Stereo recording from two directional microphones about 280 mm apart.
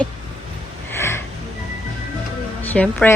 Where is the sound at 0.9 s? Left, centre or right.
Centre.